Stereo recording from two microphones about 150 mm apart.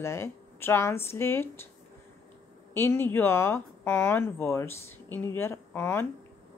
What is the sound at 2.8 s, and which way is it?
A woman's voice, 15° left (ahead or behind).